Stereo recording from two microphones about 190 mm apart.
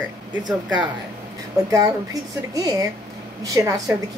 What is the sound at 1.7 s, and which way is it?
A woman's voice, 20° right (ahead or behind).